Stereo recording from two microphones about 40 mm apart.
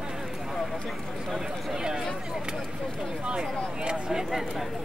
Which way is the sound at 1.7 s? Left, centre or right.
Centre.